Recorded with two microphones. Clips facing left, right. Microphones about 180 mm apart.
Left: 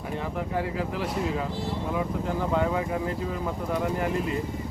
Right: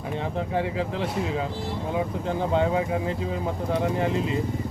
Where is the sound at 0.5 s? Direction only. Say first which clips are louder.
Right 2 dB; 25° right (ahead or behind).